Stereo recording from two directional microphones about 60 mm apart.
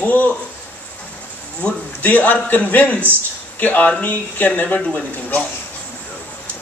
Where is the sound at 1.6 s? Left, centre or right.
Left.